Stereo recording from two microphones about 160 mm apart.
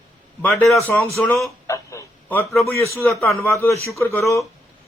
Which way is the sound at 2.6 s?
15° left (ahead or behind).